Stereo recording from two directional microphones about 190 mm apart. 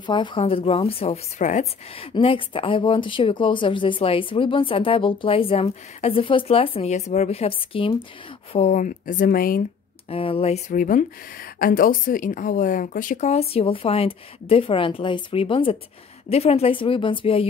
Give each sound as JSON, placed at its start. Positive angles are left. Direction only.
{"t": 0.0, "sound": "a woman's voice", "side_deg": 25}
{"t": 8.5, "sound": "speech", "side_deg": 40}
{"t": 10.0, "sound": "a woman's voice", "side_deg": 30}